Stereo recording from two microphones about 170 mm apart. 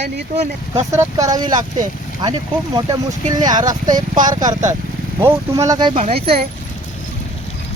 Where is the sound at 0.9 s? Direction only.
20° right (ahead or behind).